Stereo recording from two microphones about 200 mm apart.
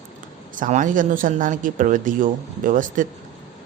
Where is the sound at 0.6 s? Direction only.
40° right (ahead or behind).